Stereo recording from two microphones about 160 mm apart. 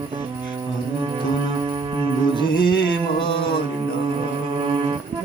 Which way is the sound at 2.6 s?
30° left (ahead or behind).